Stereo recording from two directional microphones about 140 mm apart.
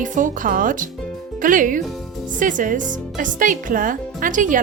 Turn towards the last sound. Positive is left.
turn(degrees=-70)  # may be behind; listen again after turning